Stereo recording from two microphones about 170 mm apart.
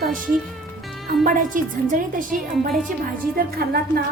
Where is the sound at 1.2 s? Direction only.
50° right (ahead or behind).